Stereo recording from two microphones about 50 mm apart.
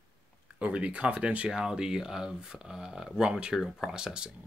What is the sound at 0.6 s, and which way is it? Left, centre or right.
Speech, right.